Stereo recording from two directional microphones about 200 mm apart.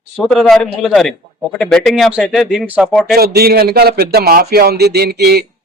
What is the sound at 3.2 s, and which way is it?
Speech, 50° right (ahead or behind).